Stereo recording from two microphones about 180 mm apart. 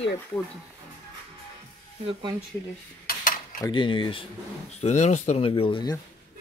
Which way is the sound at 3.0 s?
50° left (ahead or behind).